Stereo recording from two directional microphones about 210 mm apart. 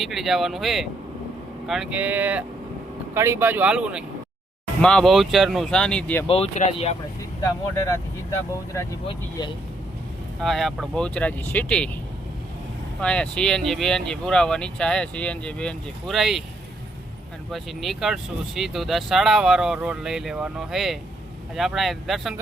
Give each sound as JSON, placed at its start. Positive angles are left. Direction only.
{"t": 0.0, "sound": "speech", "side_deg": 0}
{"t": 6.2, "sound": "speech", "side_deg": 30}
{"t": 7.4, "sound": "speech", "side_deg": 15}
{"t": 9.0, "sound": "speech", "side_deg": 25}
{"t": 10.4, "sound": "speech", "side_deg": 0}
{"t": 13.0, "sound": "speech", "side_deg": 5}
{"t": 17.5, "sound": "speech", "side_deg": 0}